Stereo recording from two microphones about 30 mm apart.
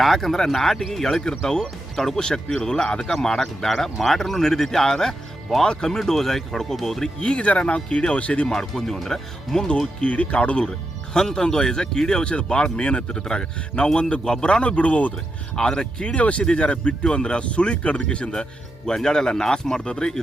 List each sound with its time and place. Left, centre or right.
0.0 s speech: centre
1.0 s speech: left
3.4 s speech: centre
4.3 s speech: centre
7.2 s speech: left
8.7 s speech: centre
10.0 s speech: left
10.6 s speech: left
14.8 s speech: left
15.1 s speech: left
16.1 s speech: left
18.9 s speech: left